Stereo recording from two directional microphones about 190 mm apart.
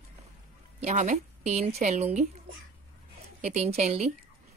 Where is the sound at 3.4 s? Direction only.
35° right (ahead or behind).